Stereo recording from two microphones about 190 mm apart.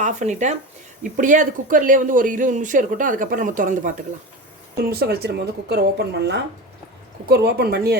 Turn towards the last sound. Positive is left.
turn(degrees=-55)  # may be behind; listen again after turning